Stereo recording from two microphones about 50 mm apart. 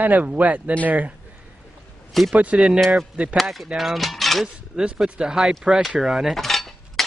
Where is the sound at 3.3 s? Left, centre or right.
Centre.